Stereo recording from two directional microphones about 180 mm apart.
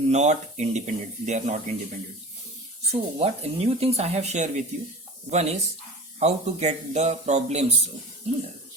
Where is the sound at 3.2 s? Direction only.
35° right (ahead or behind).